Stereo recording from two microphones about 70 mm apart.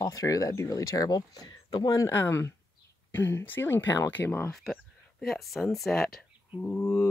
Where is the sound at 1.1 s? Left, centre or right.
Left.